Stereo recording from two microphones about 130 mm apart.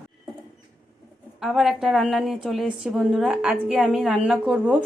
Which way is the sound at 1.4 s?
Centre (ahead or behind).